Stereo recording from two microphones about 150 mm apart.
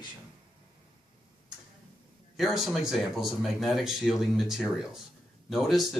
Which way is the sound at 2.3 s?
Centre (ahead or behind).